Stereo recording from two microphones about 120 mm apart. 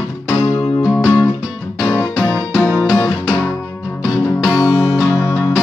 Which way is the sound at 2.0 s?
10° left (ahead or behind).